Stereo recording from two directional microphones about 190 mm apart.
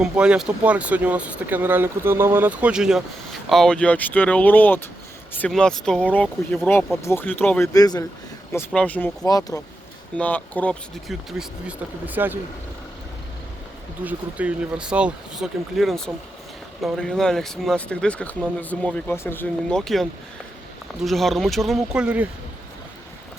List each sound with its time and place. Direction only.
0.0 s speech: 5° right (ahead or behind)
6.2 s speech: 5° right (ahead or behind)
7.0 s speech: 10° left (ahead or behind)
8.5 s speech: 5° left (ahead or behind)
9.2 s speech: 20° left (ahead or behind)
10.2 s speech: 10° left (ahead or behind); by 12.4 s 10° right (ahead or behind)
14.0 s speech: 10° right (ahead or behind)